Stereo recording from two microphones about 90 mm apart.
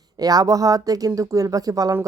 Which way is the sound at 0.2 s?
45° right (ahead or behind).